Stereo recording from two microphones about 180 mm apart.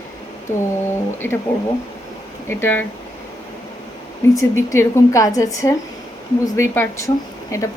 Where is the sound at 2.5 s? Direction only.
10° left (ahead or behind).